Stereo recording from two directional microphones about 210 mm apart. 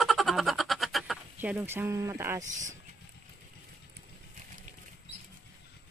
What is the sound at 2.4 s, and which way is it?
Speech, 35° right (ahead or behind).